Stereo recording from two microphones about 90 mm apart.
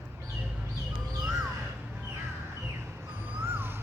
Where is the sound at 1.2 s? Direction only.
5° right (ahead or behind).